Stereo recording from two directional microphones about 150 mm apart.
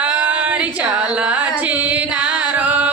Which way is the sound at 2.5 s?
10° right (ahead or behind).